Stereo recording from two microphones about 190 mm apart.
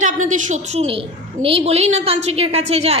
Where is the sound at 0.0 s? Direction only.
40° right (ahead or behind).